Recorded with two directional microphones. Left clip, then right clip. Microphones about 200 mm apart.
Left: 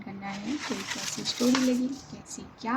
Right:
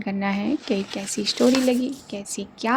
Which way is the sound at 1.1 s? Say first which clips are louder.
Right 8 dB; 50° right (ahead or behind).